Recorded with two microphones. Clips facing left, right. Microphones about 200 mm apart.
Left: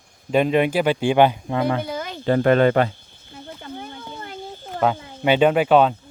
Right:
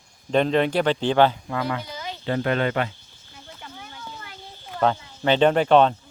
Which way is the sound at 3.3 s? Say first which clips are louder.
Left 8 dB; 55° left (ahead or behind).